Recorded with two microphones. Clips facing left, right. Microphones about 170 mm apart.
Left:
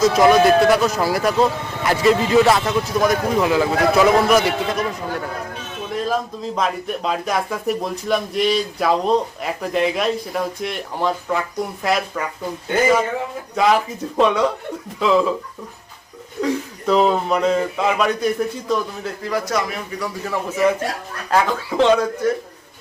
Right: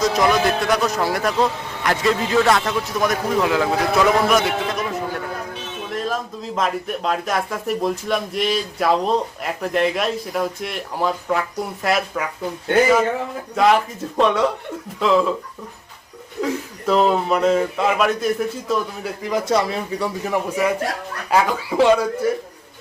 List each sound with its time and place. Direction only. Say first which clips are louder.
0.0 s speech: left 5 dB; centre (ahead or behind)
13.6 s speech: right 1 dB; centre (ahead or behind)
16.4 s speech: left 2 dB; centre (ahead or behind)
19.2 s speech: right 3 dB; 20° right (ahead or behind)
20.2 s speech: left 3 dB; 15° right (ahead or behind)